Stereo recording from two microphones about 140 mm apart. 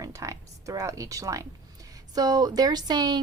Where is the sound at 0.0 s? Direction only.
20° right (ahead or behind).